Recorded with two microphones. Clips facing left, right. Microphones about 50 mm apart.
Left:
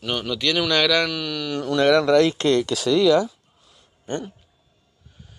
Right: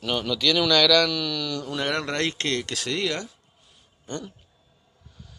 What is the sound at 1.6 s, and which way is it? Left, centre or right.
Speech, left.